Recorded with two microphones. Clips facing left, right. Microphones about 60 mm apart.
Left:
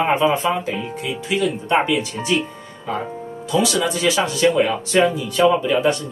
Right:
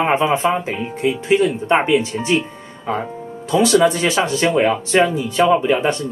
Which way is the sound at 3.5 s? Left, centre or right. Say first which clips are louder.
Right 6 dB; right.